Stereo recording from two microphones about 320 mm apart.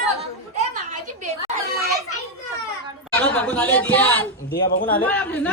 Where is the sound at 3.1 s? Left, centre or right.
Centre.